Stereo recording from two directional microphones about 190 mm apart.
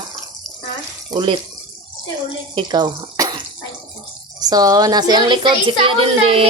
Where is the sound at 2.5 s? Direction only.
25° right (ahead or behind).